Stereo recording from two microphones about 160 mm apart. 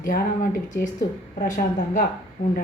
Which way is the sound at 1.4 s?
60° left (ahead or behind).